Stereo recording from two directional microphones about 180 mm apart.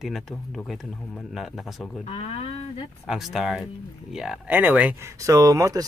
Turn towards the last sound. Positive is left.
turn(degrees=-20)  # may be behind; listen again after turning